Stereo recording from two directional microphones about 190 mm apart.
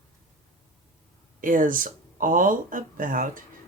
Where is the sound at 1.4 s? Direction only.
45° right (ahead or behind).